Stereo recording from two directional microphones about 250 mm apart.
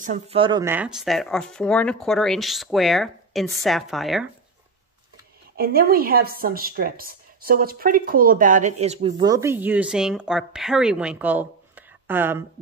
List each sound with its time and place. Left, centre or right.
0.0 s speech: right; by 4.3 s centre
5.6 s speech: right; by 12.4 s centre